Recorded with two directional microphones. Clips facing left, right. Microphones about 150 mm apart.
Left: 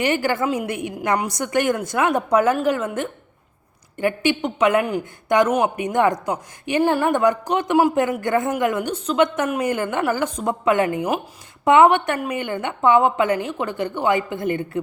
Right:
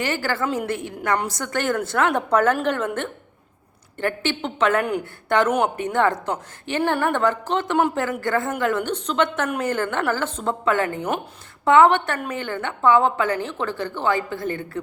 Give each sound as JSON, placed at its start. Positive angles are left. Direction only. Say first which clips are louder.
{"t": 0.0, "sound": "speech", "louder": "left 4 dB", "side_deg": 15}